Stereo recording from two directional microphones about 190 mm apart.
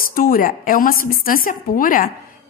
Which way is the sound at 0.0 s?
50° left (ahead or behind).